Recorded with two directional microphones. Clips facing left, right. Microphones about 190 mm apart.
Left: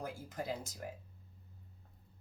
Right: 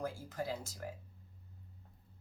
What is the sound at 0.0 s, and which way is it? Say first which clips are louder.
Speech: right 2 dB; 20° left (ahead or behind).